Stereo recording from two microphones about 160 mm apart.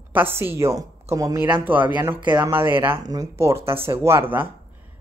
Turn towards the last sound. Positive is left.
turn(degrees=-15)  # may be behind; listen again after turning